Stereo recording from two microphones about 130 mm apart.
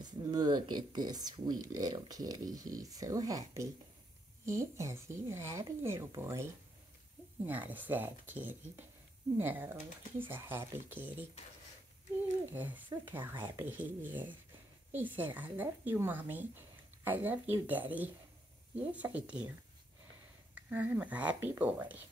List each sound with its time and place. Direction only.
0.0 s speech: 30° right (ahead or behind)
7.7 s speech: 15° right (ahead or behind)
12.5 s speech: 15° right (ahead or behind)
20.5 s speech: 15° right (ahead or behind)